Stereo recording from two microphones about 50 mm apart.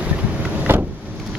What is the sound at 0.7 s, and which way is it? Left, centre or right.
Vehicle, right.